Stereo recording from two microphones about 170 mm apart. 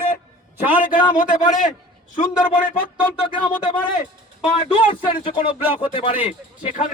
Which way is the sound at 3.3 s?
30° left (ahead or behind).